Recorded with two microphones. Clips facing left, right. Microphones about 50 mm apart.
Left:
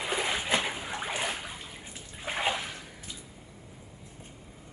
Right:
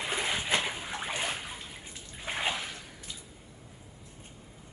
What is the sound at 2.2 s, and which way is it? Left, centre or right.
Bathtub, centre.